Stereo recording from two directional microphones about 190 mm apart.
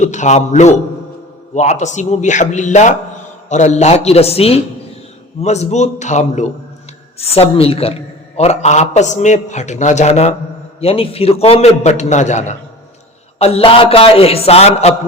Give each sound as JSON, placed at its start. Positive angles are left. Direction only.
{"t": 0.0, "sound": "a man's voice", "side_deg": 40}